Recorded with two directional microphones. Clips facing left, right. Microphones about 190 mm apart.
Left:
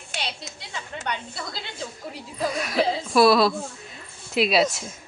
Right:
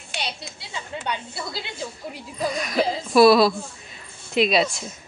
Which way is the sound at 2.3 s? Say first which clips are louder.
Right 1 dB; 5° left (ahead or behind).